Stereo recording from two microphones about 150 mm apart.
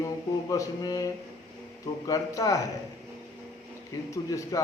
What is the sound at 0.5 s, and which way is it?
Speech, 25° left (ahead or behind).